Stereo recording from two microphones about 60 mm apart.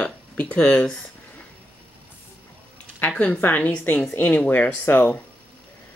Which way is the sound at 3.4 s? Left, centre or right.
Left.